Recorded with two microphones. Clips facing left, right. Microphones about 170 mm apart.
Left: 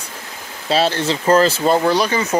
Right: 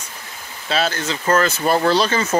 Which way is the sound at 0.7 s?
30° left (ahead or behind).